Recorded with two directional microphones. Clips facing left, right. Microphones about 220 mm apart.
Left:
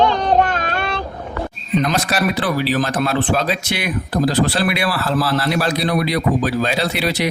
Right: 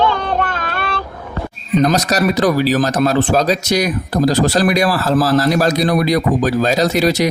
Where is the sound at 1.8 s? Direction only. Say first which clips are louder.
Right 6 dB; 40° right (ahead or behind).